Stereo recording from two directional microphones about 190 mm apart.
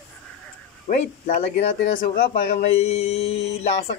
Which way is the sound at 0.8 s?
40° left (ahead or behind).